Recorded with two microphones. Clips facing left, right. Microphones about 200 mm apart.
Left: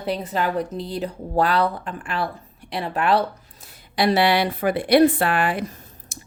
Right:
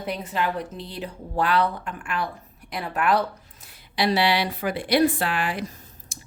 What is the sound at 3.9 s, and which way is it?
A woman's voice, 50° left (ahead or behind).